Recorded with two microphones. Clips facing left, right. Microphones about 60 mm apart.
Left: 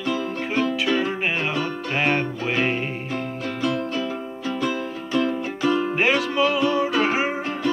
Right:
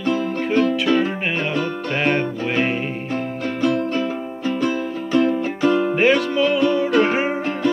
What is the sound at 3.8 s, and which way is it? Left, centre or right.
Music, right.